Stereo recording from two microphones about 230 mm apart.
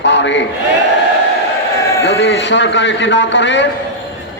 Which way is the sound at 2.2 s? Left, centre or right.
Left.